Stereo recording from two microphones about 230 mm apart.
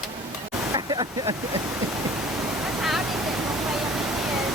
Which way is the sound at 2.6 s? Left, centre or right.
Centre.